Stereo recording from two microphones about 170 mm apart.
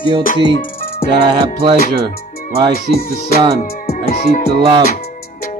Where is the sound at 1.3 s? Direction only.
25° right (ahead or behind).